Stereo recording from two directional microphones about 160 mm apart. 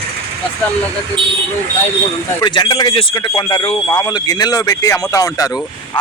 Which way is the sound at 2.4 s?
25° left (ahead or behind).